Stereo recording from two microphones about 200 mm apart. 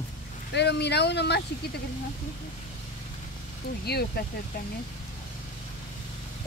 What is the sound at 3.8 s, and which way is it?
Speech, 50° left (ahead or behind).